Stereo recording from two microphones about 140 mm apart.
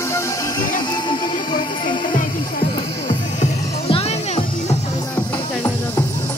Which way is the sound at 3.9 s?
45° left (ahead or behind).